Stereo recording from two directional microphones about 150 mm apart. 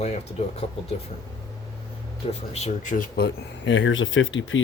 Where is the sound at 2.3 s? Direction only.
45° left (ahead or behind); by 3.2 s 65° left (ahead or behind).